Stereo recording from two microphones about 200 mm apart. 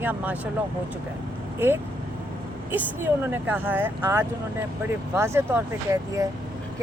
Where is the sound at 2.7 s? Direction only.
10° right (ahead or behind).